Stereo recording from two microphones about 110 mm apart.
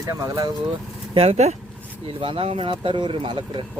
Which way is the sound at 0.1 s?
30° right (ahead or behind).